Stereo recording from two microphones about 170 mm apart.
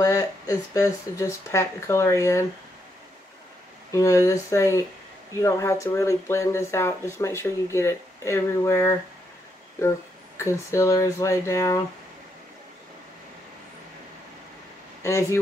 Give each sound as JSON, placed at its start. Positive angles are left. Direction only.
{"t": 0.0, "sound": "speech", "side_deg": 20}
{"t": 3.9, "sound": "speech", "side_deg": 20}
{"t": 15.0, "sound": "speech", "side_deg": 15}